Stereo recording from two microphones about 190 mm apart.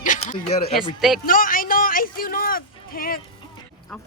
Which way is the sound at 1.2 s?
45° left (ahead or behind).